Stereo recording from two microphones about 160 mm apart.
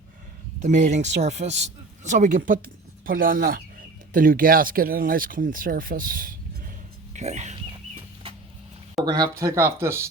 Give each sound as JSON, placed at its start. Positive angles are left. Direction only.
{"t": 0.6, "sound": "speech", "side_deg": -50}
{"t": 7.1, "sound": "speech", "side_deg": -45}
{"t": 9.1, "sound": "speech", "side_deg": -20}